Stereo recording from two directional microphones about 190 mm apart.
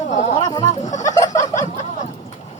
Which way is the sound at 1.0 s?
20° left (ahead or behind).